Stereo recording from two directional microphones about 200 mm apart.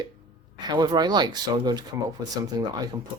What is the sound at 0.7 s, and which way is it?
Speech, 20° right (ahead or behind).